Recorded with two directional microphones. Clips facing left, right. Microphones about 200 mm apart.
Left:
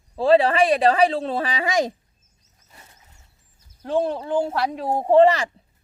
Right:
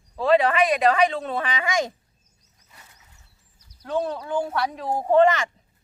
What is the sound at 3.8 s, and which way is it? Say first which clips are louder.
Speech: left 4 dB; 30° left (ahead or behind).